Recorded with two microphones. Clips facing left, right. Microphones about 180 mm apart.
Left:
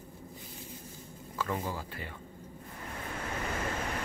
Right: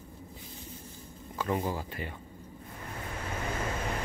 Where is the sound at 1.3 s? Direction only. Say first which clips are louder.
Right 4 dB; 25° right (ahead or behind).